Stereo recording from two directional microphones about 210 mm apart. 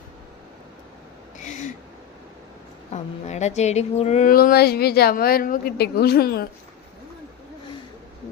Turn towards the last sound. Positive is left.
turn(degrees=45)  # may be behind; listen again after turning